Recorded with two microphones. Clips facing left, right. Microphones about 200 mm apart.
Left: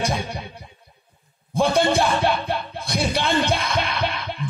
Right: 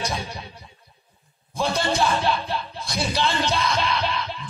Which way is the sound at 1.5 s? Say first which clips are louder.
Left 5 dB; 55° left (ahead or behind).